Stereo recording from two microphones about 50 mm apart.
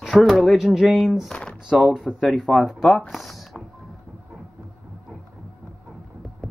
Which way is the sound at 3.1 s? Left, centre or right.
Centre.